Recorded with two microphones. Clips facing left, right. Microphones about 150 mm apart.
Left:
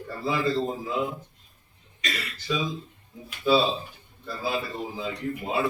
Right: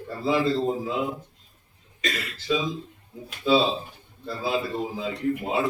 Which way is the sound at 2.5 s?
20° right (ahead or behind).